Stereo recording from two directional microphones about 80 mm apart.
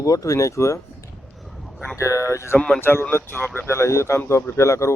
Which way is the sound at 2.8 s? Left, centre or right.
Left.